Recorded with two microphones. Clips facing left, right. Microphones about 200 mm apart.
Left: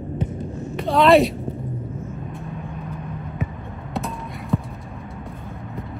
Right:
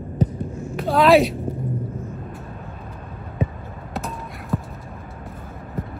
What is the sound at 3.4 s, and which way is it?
Basketball bounce, 30° right (ahead or behind).